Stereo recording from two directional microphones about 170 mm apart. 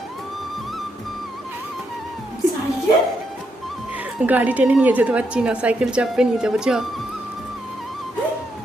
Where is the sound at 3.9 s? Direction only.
10° right (ahead or behind).